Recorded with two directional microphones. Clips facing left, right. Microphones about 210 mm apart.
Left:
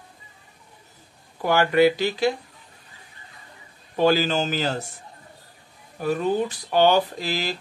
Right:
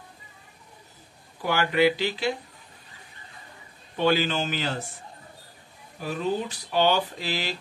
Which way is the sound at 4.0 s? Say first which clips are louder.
Left 4 dB; 40° left (ahead or behind).